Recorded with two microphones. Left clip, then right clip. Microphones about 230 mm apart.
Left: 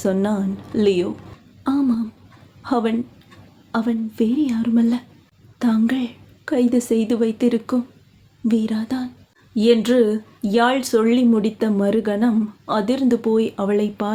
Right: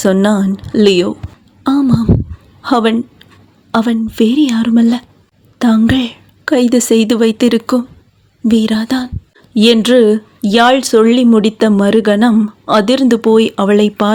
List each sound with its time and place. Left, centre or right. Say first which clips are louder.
0.0 s speech: right 9 dB; right
1.6 s a sound: right 8 dB; right
2.6 s a woman's voice: right 9 dB; right